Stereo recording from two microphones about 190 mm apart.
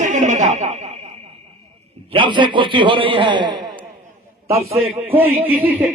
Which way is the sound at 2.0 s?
25° right (ahead or behind).